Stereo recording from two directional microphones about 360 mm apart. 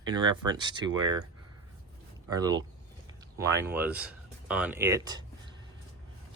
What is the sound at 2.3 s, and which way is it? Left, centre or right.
Speech, centre.